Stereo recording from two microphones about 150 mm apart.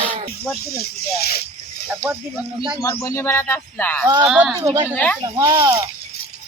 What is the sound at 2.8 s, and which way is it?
Speech, 20° left (ahead or behind).